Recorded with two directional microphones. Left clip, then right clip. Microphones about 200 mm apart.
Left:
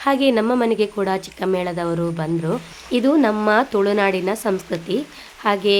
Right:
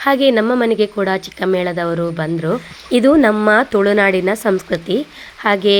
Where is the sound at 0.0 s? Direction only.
10° right (ahead or behind).